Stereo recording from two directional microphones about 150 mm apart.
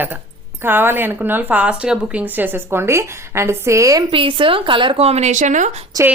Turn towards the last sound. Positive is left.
turn(degrees=-50)  # may be behind; listen again after turning